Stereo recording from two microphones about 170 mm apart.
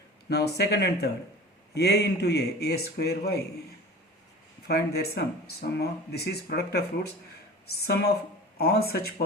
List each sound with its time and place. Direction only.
0.3 s speech: 70° left (ahead or behind)
4.7 s speech: 70° left (ahead or behind)